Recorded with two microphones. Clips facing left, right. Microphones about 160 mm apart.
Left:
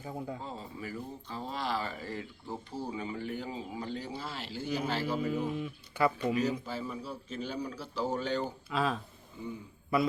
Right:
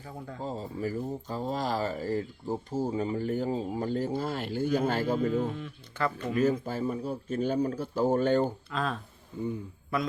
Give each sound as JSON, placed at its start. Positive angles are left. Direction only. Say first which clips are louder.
{"t": 0.4, "sound": "speech", "louder": "right 8 dB", "side_deg": -40}
{"t": 5.3, "sound": "speech", "louder": "right 3 dB", "side_deg": 10}
{"t": 6.3, "sound": "speech", "louder": "right 5 dB", "side_deg": -50}
{"t": 8.7, "sound": "speech", "louder": "left 1 dB", "side_deg": 5}
{"t": 9.3, "sound": "a man's voice", "louder": "right 8 dB", "side_deg": -55}